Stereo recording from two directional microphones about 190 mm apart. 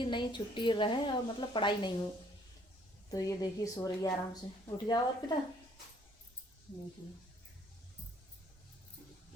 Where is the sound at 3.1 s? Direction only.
20° left (ahead or behind).